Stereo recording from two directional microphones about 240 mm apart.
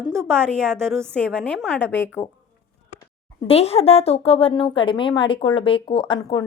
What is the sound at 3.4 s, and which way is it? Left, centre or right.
A woman's voice, left.